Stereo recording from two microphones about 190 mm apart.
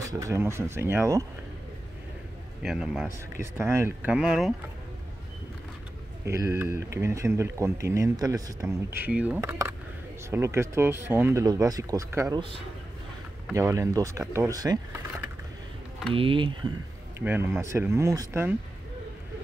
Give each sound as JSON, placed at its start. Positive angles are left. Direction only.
{"t": 0.0, "sound": "speech", "side_deg": -15}
{"t": 2.6, "sound": "a man's voice", "side_deg": -5}
{"t": 3.5, "sound": "speech", "side_deg": -15}
{"t": 6.2, "sound": "speech", "side_deg": -15}
{"t": 12.4, "sound": "speech", "side_deg": -30}
{"t": 13.5, "sound": "speech", "side_deg": -15}
{"t": 16.1, "sound": "speech", "side_deg": -30}
{"t": 17.2, "sound": "speech", "side_deg": -10}